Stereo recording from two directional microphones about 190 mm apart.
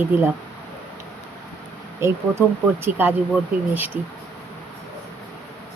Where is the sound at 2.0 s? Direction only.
15° right (ahead or behind).